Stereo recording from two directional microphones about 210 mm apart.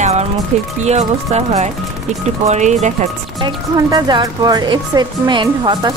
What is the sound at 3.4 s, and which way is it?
Speech, 20° right (ahead or behind).